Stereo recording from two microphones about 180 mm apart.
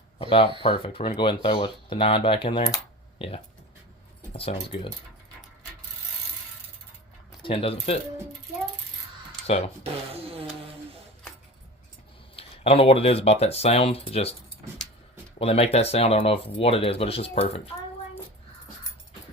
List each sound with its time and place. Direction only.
0.2 s speech: 30° left (ahead or behind)
4.4 s speech: 35° left (ahead or behind)
7.4 s speech: 30° left (ahead or behind)
9.8 s speech: 35° right (ahead or behind)
12.4 s speech: 30° left (ahead or behind)
15.4 s speech: 35° left (ahead or behind)